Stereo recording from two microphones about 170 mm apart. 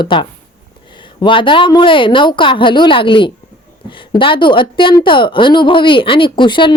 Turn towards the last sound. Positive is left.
turn(degrees=30)  # may be behind; listen again after turning